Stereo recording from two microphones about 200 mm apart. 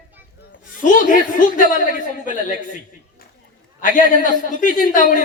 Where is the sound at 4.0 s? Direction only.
40° left (ahead or behind).